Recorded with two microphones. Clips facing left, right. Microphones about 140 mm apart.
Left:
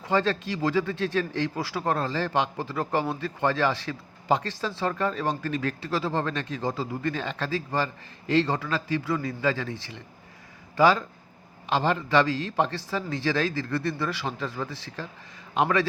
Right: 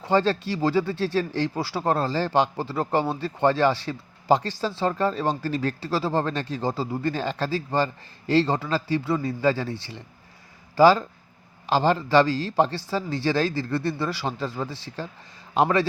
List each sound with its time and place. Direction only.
0.0 s speech: 30° right (ahead or behind)